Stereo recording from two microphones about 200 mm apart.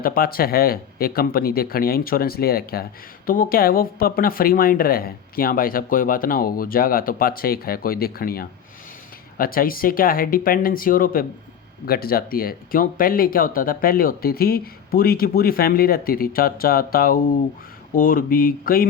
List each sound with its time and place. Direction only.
0.0 s speech: 45° left (ahead or behind)